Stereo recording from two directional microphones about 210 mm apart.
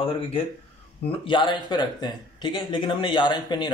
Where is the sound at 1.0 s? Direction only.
25° left (ahead or behind).